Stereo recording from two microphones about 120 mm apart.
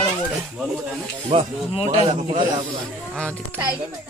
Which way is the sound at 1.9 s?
80° right.